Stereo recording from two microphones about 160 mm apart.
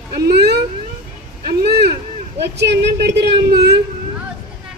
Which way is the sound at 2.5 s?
90° right.